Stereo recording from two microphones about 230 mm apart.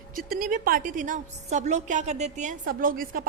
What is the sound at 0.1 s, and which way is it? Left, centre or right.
A woman's voice, right.